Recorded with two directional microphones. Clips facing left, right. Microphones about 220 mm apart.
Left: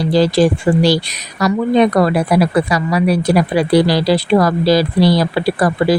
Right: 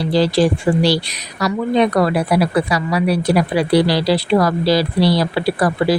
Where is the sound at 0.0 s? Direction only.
45° left (ahead or behind).